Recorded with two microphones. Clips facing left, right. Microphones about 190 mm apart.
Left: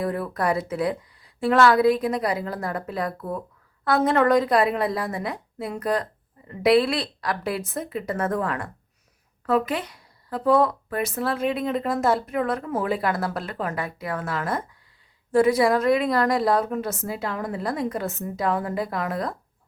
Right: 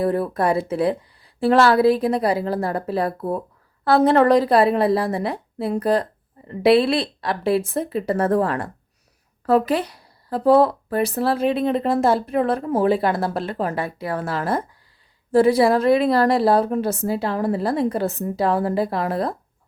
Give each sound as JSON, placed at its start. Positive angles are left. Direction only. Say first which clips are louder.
{"t": 0.0, "sound": "speech", "louder": "right 5 dB", "side_deg": -30}